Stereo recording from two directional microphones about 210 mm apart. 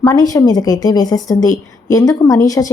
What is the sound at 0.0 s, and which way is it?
Speech, 15° left (ahead or behind).